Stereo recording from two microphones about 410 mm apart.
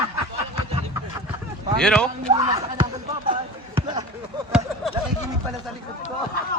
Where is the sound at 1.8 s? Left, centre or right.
Centre.